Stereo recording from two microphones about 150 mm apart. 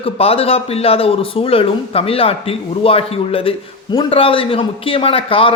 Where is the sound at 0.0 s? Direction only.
40° left (ahead or behind).